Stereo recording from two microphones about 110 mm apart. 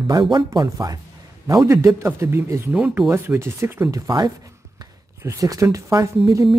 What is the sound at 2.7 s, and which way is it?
Speech, 10° right (ahead or behind).